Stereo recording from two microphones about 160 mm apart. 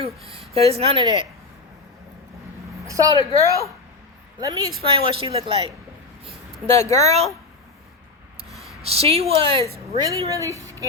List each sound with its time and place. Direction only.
0.3 s speech: 40° right (ahead or behind)
2.8 s a woman's voice: 20° right (ahead or behind)
4.8 s speech: 35° right (ahead or behind)
6.7 s speech: 20° left (ahead or behind)
7.0 s speech: 45° right (ahead or behind)
8.4 s a sound: centre (ahead or behind)
8.8 s speech: 40° right (ahead or behind)
10.0 s a woman's voice: 20° right (ahead or behind)